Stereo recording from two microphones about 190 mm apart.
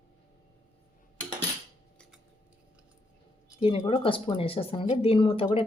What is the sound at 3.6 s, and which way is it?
Speech, 25° left (ahead or behind).